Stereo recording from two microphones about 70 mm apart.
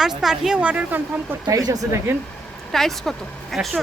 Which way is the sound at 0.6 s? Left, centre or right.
Centre.